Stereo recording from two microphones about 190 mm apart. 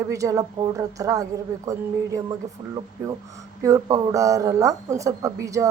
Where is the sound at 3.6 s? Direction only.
15° right (ahead or behind).